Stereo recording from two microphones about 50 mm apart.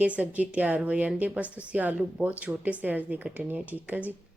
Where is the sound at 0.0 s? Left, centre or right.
Right.